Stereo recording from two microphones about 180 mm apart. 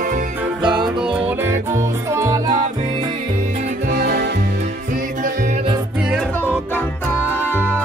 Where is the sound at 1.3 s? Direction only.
10° right (ahead or behind).